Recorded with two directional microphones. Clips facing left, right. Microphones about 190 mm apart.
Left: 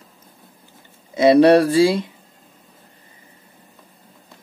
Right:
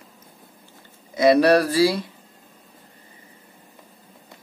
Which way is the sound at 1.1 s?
25° left (ahead or behind).